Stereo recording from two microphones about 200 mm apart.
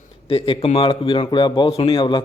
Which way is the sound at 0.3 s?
25° left (ahead or behind).